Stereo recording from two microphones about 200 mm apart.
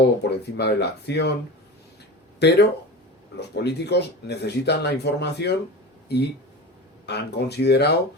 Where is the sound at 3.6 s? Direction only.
55° left (ahead or behind).